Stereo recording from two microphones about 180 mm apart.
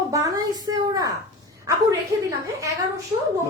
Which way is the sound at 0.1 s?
20° right (ahead or behind).